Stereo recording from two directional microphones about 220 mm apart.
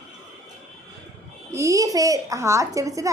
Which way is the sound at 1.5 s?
15° right (ahead or behind).